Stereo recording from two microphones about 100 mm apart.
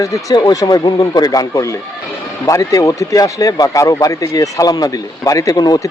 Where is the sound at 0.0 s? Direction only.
35° left (ahead or behind).